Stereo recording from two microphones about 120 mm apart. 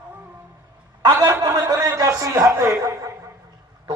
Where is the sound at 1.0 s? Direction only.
30° right (ahead or behind).